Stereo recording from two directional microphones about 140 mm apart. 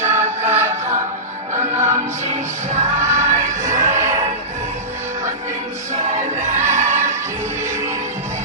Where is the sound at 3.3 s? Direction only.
20° right (ahead or behind).